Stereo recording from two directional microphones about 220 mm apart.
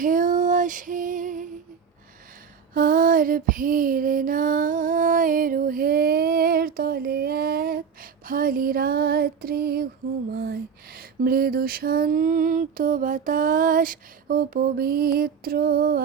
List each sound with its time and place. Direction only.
0.0 s female singing: 35° right (ahead or behind)
2.7 s female singing: 40° right (ahead or behind)